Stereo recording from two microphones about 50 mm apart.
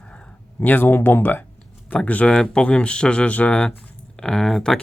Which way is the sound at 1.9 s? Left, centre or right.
Left.